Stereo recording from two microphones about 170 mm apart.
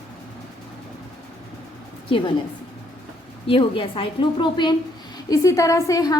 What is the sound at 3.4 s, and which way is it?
A woman's voice, 30° left (ahead or behind).